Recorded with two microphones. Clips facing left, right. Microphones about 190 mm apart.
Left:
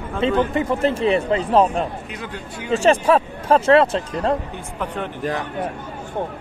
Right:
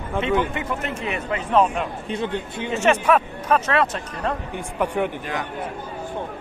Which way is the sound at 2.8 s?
30° left (ahead or behind).